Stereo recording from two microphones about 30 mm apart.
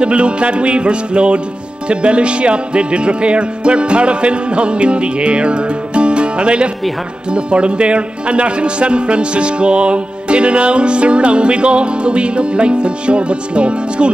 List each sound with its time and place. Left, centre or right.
0.0 s a man's voice: right